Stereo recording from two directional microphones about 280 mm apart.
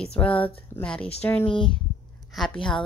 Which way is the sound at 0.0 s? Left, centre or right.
Centre.